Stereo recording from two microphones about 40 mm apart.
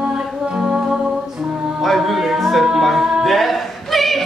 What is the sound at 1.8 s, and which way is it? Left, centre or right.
Music, centre.